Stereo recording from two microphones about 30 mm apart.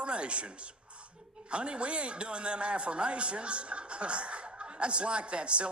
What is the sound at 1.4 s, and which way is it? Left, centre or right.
A man's voice, right.